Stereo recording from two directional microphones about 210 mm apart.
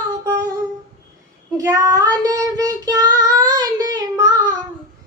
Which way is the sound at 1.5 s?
15° right (ahead or behind).